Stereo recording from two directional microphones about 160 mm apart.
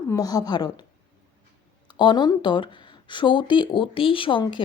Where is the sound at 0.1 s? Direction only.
20° left (ahead or behind).